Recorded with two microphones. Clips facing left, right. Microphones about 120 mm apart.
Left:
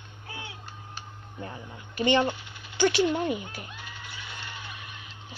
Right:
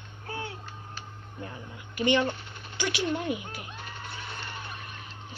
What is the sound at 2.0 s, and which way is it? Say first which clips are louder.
Speech: left 1 dB; 30° left (ahead or behind).